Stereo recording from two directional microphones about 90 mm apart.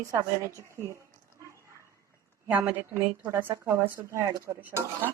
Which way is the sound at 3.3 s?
30° right (ahead or behind).